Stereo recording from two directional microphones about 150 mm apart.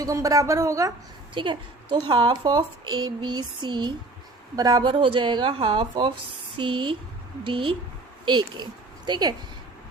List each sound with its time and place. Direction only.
0.0 s a woman's voice: 20° right (ahead or behind)
1.3 s a woman's voice: 30° right (ahead or behind)